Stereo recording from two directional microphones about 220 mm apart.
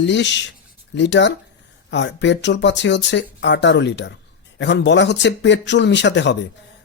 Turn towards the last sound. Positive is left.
turn(degrees=55)  # may be behind; listen again after turning